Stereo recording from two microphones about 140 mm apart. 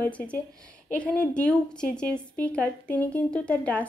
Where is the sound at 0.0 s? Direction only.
15° left (ahead or behind).